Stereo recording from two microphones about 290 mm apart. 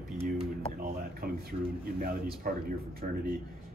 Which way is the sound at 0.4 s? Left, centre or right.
Right.